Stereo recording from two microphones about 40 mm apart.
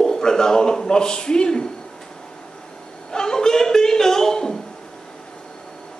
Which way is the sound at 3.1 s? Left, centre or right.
Centre.